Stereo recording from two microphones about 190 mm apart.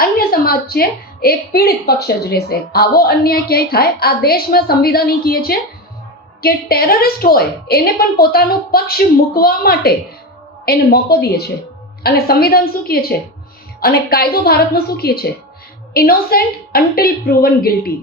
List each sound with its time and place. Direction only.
0.0 s a woman's voice: 50° left (ahead or behind)